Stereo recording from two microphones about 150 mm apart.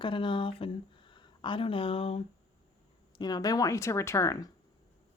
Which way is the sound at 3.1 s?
25° left (ahead or behind).